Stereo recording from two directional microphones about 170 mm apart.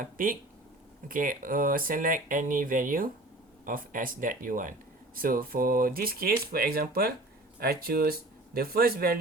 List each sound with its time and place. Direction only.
0.0 s speech: 55° right (ahead or behind)